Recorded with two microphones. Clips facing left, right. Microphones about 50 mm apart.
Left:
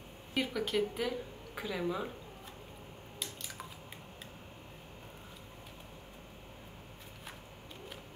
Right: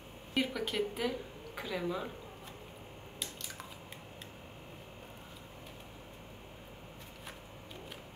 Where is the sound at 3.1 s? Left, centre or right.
Centre.